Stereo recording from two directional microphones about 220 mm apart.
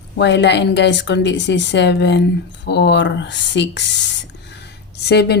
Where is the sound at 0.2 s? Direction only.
50° left (ahead or behind).